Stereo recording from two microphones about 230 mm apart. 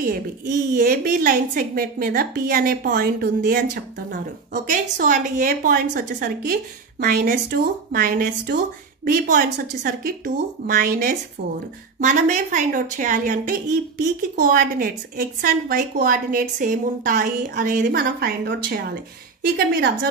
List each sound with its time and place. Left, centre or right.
0.0 s a woman's voice: right